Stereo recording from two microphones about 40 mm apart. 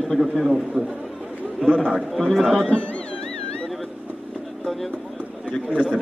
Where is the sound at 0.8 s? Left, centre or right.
Right.